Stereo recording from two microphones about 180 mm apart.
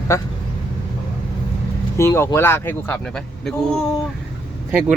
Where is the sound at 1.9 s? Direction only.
15° left (ahead or behind).